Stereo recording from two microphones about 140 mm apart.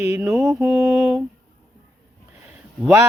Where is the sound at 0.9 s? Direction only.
5° right (ahead or behind).